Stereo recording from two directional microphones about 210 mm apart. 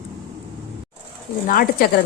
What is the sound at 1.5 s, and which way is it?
Speech, 45° left (ahead or behind).